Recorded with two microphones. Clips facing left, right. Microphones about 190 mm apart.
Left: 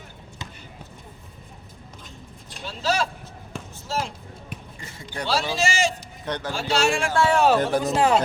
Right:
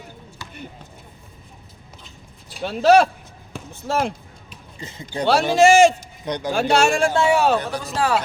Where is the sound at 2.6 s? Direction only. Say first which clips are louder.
Right 11 dB; 60° right (ahead or behind).